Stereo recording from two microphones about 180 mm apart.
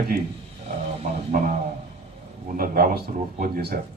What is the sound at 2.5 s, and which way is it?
Speech, 55° right (ahead or behind).